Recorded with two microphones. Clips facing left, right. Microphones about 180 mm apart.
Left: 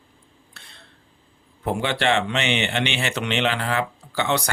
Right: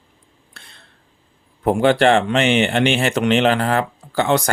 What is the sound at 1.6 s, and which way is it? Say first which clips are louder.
Speech: right 8 dB; 45° right (ahead or behind).